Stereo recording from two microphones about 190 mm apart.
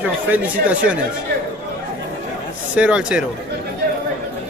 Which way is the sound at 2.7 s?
5° right (ahead or behind).